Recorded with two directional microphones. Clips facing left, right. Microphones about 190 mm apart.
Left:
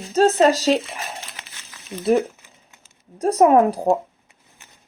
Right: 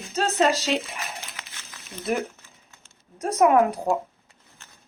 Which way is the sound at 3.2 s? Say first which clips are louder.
Left 4 dB; 35° left (ahead or behind).